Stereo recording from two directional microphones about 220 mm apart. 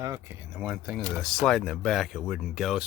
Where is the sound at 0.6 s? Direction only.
5° right (ahead or behind).